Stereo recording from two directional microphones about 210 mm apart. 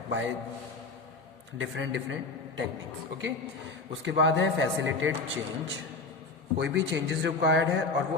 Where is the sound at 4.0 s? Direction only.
60° right (ahead or behind).